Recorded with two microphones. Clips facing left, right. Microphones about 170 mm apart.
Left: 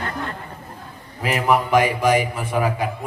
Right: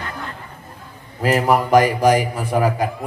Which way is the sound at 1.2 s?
40° right (ahead or behind).